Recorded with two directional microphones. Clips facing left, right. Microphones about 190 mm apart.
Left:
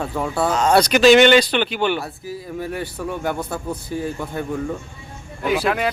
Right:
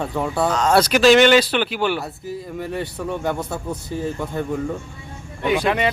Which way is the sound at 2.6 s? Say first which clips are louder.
Even; 5° left (ahead or behind).